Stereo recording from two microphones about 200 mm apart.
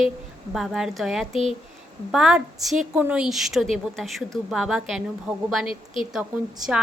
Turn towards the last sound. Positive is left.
turn(degrees=-5)  # may be behind; listen again after turning